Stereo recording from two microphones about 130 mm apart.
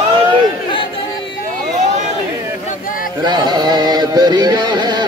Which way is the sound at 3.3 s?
35° right (ahead or behind).